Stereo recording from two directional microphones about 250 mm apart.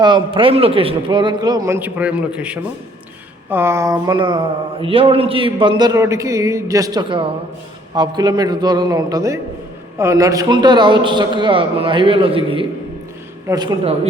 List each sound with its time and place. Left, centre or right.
0.0 s a man's voice: centre